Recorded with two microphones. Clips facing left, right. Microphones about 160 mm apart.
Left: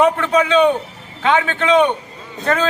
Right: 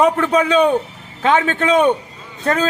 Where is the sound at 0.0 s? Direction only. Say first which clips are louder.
Even; 35° right (ahead or behind).